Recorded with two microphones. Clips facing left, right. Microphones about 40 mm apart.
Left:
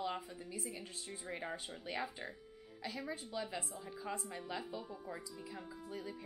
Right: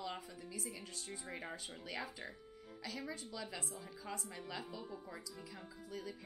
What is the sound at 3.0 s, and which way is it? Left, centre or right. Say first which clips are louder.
A woman's voice: left 4 dB; centre.